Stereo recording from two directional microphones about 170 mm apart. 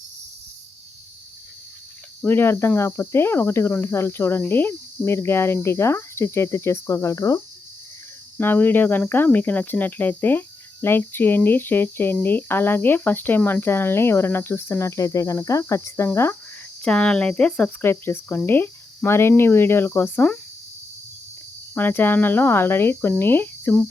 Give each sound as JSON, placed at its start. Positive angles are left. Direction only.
{"t": 2.2, "sound": "speech", "side_deg": 15}
{"t": 21.8, "sound": "speech", "side_deg": 10}